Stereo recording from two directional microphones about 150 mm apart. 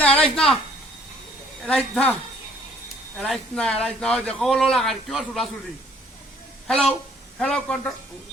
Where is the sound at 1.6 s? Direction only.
5° left (ahead or behind).